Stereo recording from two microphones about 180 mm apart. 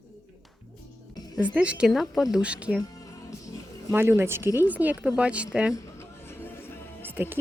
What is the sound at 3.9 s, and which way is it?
Speech, 15° right (ahead or behind).